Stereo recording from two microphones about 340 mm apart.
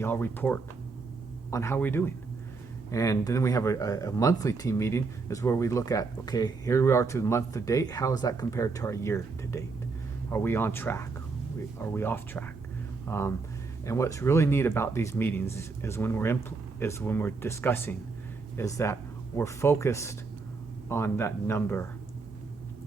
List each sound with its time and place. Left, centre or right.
0.0 s speech: centre